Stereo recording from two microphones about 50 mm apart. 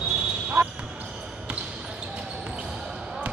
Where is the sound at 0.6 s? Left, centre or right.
Right.